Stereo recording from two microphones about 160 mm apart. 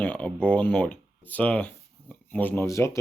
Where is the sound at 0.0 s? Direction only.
10° left (ahead or behind).